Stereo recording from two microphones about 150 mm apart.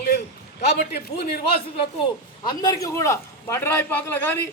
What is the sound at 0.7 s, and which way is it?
Speech, 90° left.